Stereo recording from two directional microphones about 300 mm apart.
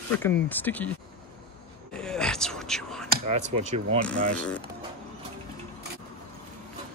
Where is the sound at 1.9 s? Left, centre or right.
Centre.